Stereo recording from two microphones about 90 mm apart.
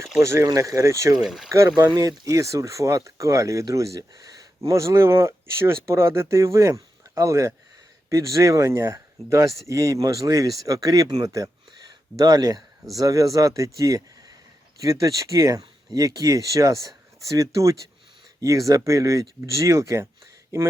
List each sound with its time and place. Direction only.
0.2 s speech: 30° right (ahead or behind)
1.1 s speech: 5° right (ahead or behind)
1.5 s speech: 35° right (ahead or behind)